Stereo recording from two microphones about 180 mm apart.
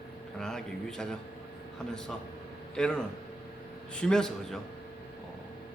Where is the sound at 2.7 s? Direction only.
5° left (ahead or behind).